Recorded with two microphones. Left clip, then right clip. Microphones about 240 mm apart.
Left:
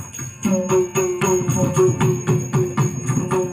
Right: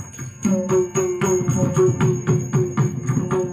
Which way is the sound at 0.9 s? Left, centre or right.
Centre.